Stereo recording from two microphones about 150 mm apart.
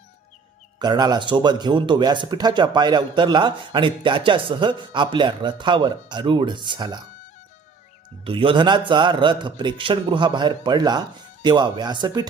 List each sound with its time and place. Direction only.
0.8 s speech: 30° right (ahead or behind)
8.2 s speech: 35° right (ahead or behind)